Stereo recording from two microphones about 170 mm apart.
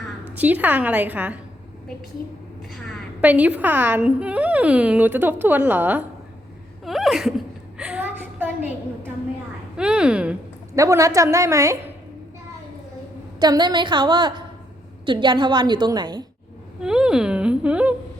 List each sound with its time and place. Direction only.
0.3 s speech: 10° right (ahead or behind)
3.2 s speech: 10° right (ahead or behind)
6.8 s laughter: centre (ahead or behind)
7.8 s a sound: 5° right (ahead or behind)
9.7 s a sound: 5° right (ahead or behind)
10.8 s a woman's voice: 20° right (ahead or behind)
13.4 s a woman's voice: 25° right (ahead or behind)
16.8 s speech: 5° right (ahead or behind)